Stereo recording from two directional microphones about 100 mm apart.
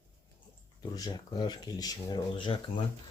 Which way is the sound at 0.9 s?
45° left (ahead or behind).